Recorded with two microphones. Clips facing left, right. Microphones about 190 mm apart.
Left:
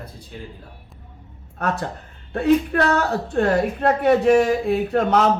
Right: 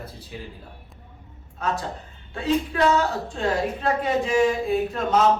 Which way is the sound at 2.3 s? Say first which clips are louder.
Left 5 dB; 60° left (ahead or behind).